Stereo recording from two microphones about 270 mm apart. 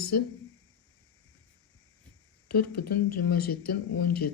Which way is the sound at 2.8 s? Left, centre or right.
Left.